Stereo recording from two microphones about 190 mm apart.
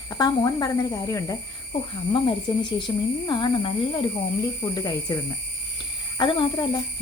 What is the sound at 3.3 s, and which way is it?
Speech, 25° left (ahead or behind).